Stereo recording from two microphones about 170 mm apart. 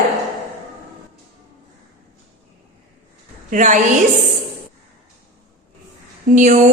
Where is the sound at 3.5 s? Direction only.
45° right (ahead or behind).